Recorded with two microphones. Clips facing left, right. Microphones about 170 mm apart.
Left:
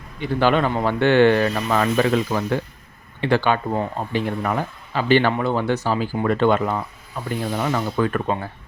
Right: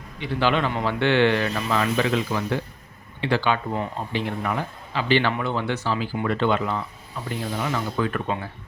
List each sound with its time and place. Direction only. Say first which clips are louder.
0.2 s speech: left 4 dB; 45° left (ahead or behind)